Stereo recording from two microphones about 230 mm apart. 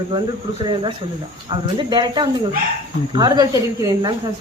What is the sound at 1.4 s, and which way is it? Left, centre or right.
Speech, centre.